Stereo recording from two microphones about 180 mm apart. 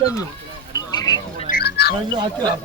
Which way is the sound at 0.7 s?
20° left (ahead or behind).